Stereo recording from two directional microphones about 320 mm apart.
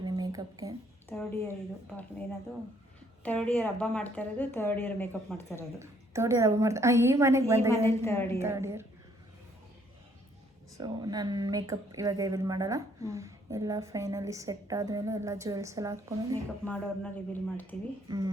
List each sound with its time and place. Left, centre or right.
0.0 s a sound: centre
1.1 s a woman's voice: centre
3.2 s a woman's voice: centre
5.8 s speech: centre
7.9 s a woman's voice: centre
8.4 s speech: centre
10.8 s speech: centre
16.6 s a woman's voice: centre
18.1 s speech: centre